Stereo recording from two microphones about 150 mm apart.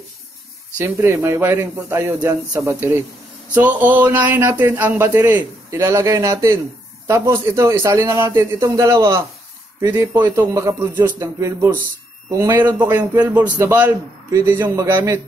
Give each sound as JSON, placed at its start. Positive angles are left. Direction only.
{"t": 0.7, "sound": "a man's voice", "side_deg": -15}